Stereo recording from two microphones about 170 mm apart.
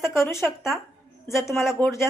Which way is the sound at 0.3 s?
Centre (ahead or behind).